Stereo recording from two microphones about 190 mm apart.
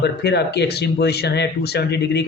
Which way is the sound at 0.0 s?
60° left (ahead or behind).